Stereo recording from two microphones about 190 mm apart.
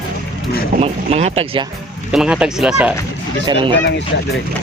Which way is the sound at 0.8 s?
35° right (ahead or behind).